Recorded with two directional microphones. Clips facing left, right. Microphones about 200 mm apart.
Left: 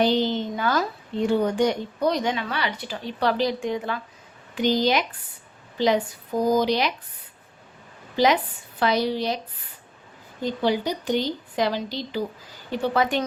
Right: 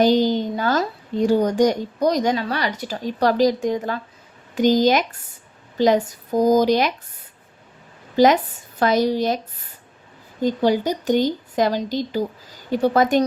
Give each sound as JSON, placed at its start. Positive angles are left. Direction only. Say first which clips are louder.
{"t": 0.0, "sound": "a woman's voice", "louder": "right 5 dB", "side_deg": -40}
{"t": 8.1, "sound": "speech", "louder": "right 5 dB", "side_deg": -45}
{"t": 10.4, "sound": "speech", "louder": "right 5 dB", "side_deg": -45}